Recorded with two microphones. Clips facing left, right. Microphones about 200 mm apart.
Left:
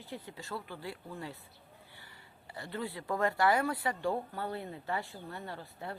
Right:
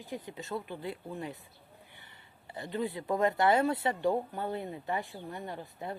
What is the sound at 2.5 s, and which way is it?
Speech, 20° right (ahead or behind).